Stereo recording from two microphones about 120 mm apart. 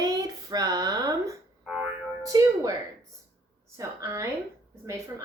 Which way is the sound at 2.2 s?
30° right (ahead or behind).